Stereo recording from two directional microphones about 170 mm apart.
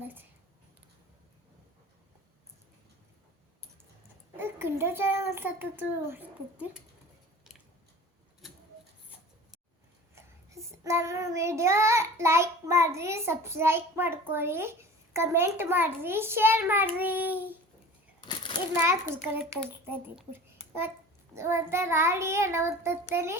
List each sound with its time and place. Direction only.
0.0 s a sound: 10° right (ahead or behind)
4.4 s child singing: 15° right (ahead or behind)
10.2 s child singing: 15° right (ahead or behind)
18.2 s a sound: 25° left (ahead or behind)
18.8 s child singing: 15° right (ahead or behind)
19.9 s a child's voice: 10° right (ahead or behind)
21.3 s child singing: 15° right (ahead or behind)